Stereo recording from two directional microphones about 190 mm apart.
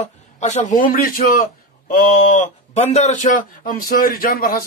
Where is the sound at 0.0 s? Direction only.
40° left (ahead or behind).